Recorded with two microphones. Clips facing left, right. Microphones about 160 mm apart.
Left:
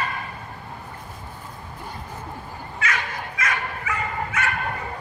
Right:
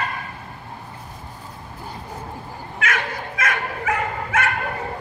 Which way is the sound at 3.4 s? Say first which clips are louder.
Right 4 dB; 55° right (ahead or behind).